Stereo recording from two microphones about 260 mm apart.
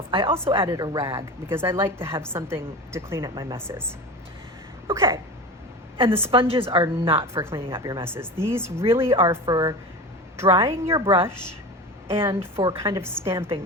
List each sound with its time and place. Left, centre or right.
0.1 s a woman's voice: centre
4.9 s a sound: centre
6.1 s a woman's voice: centre
6.3 s a woman's voice: right